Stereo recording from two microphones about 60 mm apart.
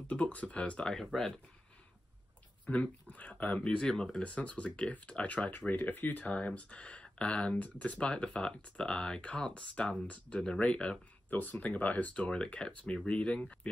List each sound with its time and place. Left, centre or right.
0.1 s speech: left
2.6 s speech: left
3.6 s speech: centre
11.2 s speech: left